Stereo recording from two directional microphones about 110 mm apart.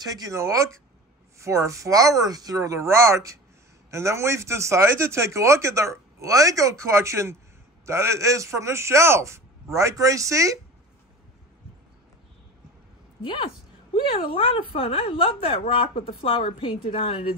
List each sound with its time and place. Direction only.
0.0 s speech: 35° right (ahead or behind)
13.2 s a woman's voice: 50° left (ahead or behind)